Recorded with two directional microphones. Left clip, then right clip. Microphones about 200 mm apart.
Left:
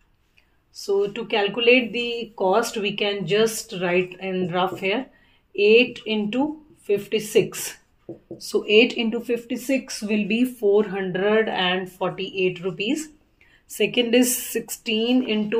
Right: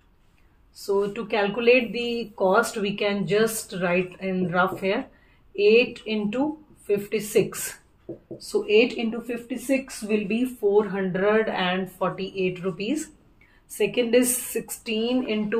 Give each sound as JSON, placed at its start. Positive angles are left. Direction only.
{"t": 0.8, "sound": "speech", "side_deg": 45}